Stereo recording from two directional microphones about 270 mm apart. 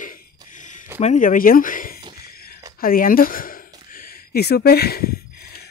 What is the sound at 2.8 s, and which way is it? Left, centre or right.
Speech, left.